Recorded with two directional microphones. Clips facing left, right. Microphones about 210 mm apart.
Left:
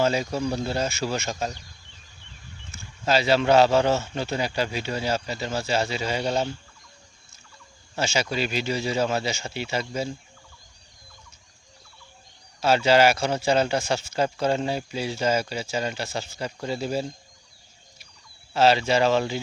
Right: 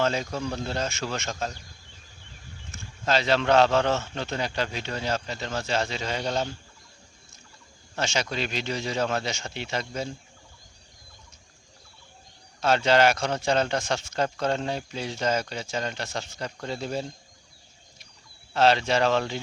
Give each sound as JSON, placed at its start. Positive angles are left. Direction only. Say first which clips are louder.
{"t": 0.0, "sound": "speech", "louder": "left 3 dB", "side_deg": 10}
{"t": 2.7, "sound": "speech", "louder": "left 2 dB", "side_deg": 10}
{"t": 7.9, "sound": "speech", "louder": "left 3 dB", "side_deg": 5}
{"t": 12.5, "sound": "speech", "louder": "left 2 dB", "side_deg": 5}
{"t": 18.5, "sound": "speech", "louder": "left 2 dB", "side_deg": 5}